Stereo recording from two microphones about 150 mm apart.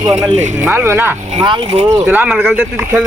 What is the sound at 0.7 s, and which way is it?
Speech, 15° right (ahead or behind).